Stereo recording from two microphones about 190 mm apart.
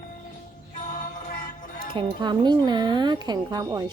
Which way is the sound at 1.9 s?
25° right (ahead or behind).